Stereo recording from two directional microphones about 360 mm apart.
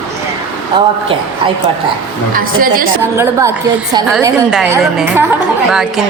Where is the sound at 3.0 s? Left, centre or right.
Centre.